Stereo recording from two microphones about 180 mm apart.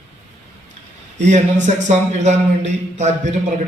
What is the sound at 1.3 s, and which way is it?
Speech, 40° right (ahead or behind).